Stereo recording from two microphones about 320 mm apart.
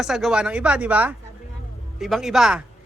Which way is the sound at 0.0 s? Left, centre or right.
Centre.